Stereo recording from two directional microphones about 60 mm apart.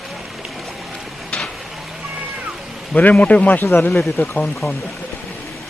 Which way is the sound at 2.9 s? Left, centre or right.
Left.